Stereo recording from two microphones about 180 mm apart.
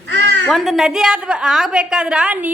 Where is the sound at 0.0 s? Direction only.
90° right.